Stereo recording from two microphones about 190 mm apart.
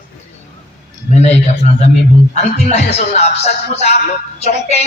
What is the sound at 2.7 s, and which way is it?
A man's voice, 35° left (ahead or behind).